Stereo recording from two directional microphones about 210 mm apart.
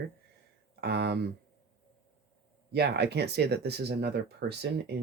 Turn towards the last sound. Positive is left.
turn(degrees=-50)  # may be behind; listen again after turning